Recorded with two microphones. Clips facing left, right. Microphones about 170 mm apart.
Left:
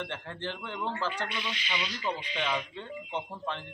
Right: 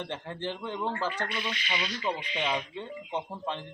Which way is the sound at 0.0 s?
15° right (ahead or behind).